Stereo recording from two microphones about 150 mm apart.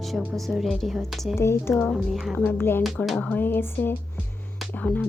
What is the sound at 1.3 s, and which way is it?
Speech, 20° left (ahead or behind).